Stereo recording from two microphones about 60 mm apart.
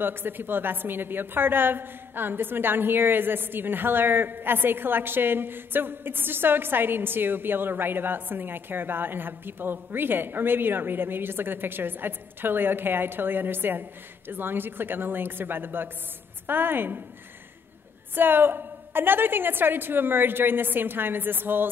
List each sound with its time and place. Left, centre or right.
0.0 s a woman's voice: right
18.1 s a woman's voice: right